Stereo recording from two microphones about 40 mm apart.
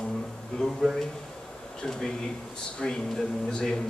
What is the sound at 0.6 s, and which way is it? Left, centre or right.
Speech, centre.